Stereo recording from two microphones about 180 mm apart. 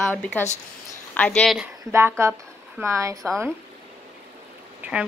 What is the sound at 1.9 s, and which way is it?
Speech, 15° right (ahead or behind).